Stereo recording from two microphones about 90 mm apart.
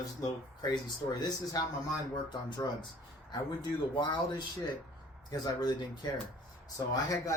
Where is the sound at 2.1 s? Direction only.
55° left (ahead or behind).